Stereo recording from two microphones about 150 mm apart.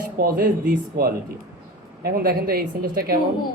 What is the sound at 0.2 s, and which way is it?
Speech, 75° right (ahead or behind).